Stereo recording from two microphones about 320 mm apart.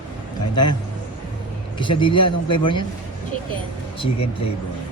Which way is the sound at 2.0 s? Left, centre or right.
Centre.